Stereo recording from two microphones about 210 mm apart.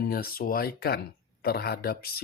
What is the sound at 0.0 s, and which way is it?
Speech, 45° left (ahead or behind).